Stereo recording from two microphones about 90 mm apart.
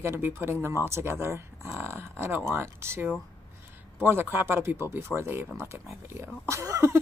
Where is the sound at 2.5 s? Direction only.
30° right (ahead or behind).